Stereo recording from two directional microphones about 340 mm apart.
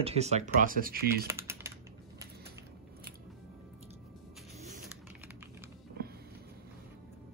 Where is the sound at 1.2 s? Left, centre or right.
Centre.